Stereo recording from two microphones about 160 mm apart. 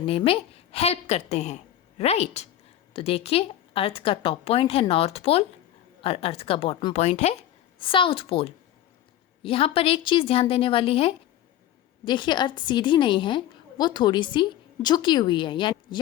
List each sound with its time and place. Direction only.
0.0 s a woman's voice: 35° left (ahead or behind)
7.8 s a woman's voice: 35° left (ahead or behind)